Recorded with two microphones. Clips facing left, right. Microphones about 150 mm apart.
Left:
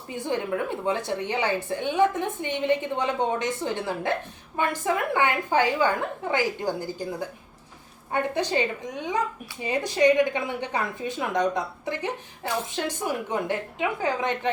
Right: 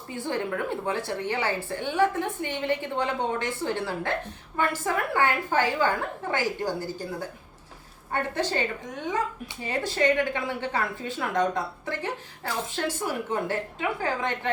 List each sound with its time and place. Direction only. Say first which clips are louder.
0.1 s speech: left 2 dB; 15° left (ahead or behind)